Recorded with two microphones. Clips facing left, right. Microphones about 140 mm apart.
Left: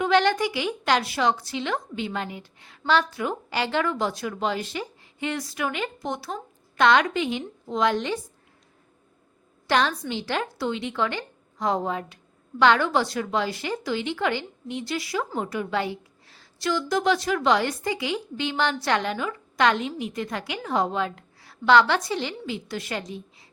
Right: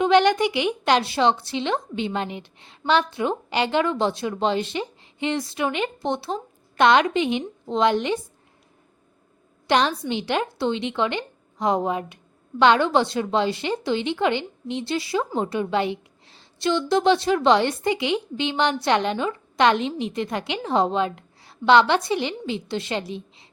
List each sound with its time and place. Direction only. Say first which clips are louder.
0.0 s a woman's voice: right 4 dB; 20° right (ahead or behind)
9.6 s a woman's voice: right 3 dB; 20° right (ahead or behind)
23.1 s a sound: right 3 dB; 20° right (ahead or behind)